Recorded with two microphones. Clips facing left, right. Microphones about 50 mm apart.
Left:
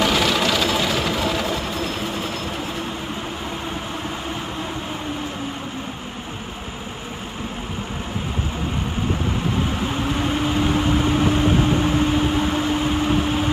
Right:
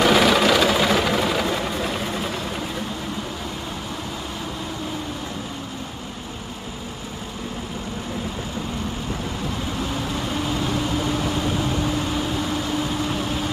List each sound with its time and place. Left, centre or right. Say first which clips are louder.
0.0 s vehicle: right 3 dB; centre
9.8 s vehicle: left 4 dB; left